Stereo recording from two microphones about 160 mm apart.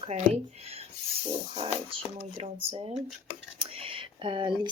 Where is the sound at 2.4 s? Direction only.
40° right (ahead or behind).